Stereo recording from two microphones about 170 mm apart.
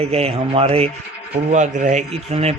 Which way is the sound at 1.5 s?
45° right (ahead or behind).